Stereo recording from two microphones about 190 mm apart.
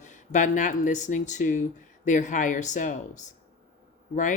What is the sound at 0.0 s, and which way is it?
Speech, 40° left (ahead or behind).